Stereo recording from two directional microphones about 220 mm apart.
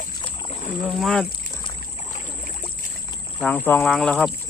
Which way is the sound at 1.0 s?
5° left (ahead or behind).